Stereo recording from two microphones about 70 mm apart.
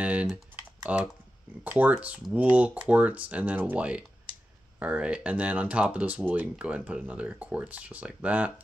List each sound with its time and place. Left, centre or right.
0.0 s typing: centre
0.9 s speech: centre